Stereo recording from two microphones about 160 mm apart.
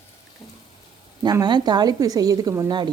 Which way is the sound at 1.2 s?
25° right (ahead or behind).